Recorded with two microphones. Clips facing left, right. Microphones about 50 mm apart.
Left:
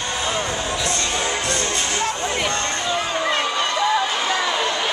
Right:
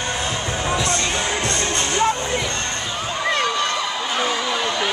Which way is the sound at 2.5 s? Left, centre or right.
Left.